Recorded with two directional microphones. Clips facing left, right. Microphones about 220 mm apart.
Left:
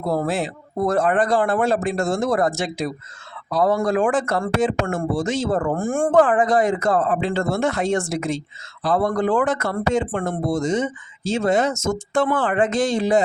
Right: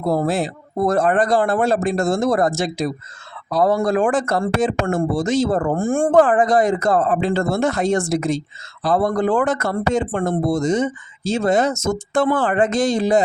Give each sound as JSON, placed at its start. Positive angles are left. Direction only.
{"t": 0.1, "sound": "speech", "side_deg": -35}